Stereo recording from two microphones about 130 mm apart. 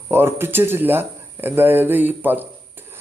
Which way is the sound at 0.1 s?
20° right (ahead or behind).